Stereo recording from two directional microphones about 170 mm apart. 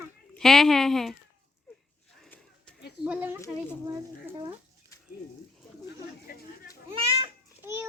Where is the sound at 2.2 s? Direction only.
5° left (ahead or behind).